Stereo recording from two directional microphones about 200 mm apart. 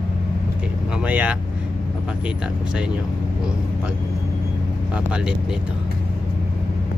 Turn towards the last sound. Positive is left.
turn(degrees=-5)  # may be behind; listen again after turning